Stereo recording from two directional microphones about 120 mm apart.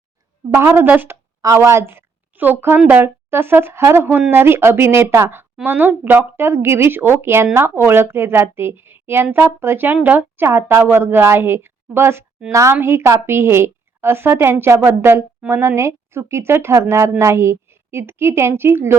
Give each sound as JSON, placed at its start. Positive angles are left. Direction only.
{"t": 0.5, "sound": "a woman's voice", "side_deg": -20}